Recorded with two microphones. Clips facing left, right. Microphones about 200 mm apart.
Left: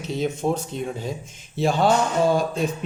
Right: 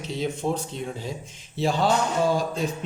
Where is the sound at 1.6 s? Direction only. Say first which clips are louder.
Left 3 dB; 55° left (ahead or behind).